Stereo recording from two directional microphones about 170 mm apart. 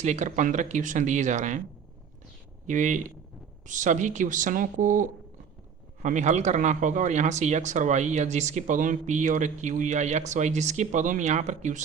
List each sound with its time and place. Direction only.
0.0 s speech: 45° right (ahead or behind)
2.6 s speech: 45° right (ahead or behind)